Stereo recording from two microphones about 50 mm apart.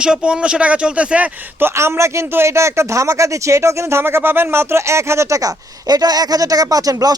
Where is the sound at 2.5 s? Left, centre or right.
Right.